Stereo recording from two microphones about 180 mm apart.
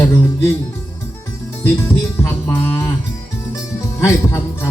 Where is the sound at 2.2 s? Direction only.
15° left (ahead or behind).